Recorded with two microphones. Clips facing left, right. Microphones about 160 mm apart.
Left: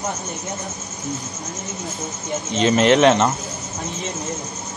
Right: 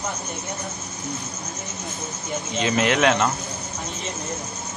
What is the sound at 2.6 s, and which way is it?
Speech, 25° left (ahead or behind).